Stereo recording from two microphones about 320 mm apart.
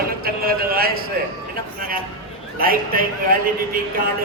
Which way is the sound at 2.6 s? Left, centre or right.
Right.